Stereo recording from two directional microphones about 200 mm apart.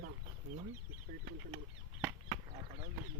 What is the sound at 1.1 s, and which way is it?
Speech, 45° right (ahead or behind).